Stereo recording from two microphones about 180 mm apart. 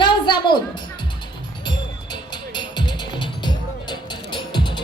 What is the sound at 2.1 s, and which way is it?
Music, 25° left (ahead or behind).